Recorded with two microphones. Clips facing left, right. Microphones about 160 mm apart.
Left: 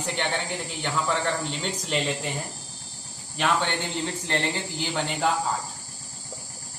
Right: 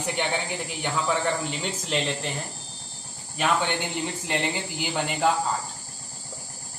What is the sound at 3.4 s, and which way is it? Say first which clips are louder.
Speech: even; 5° right (ahead or behind).